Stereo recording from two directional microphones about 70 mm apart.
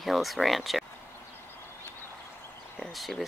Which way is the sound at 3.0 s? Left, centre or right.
Centre.